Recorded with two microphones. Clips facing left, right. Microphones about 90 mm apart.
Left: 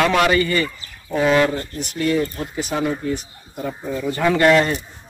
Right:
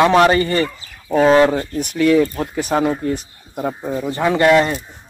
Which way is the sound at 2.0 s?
80° right.